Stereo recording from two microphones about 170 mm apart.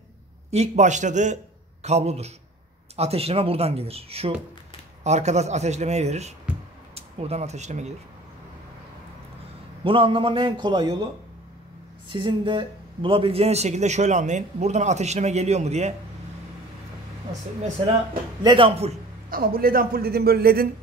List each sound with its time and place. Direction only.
0.5 s a man's voice: 40° right (ahead or behind)
9.8 s a man's voice: 30° right (ahead or behind)
12.1 s speech: 30° right (ahead or behind)
18.4 s speech: 30° right (ahead or behind)
19.3 s a man's voice: 60° right (ahead or behind)